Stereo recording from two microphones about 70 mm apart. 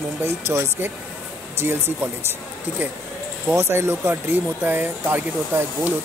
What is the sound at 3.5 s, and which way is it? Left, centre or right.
Speech, right.